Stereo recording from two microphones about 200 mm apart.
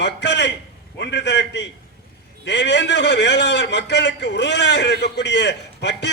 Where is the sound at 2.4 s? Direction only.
60° left (ahead or behind).